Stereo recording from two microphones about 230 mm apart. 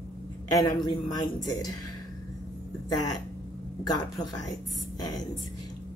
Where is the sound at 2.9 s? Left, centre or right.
Centre.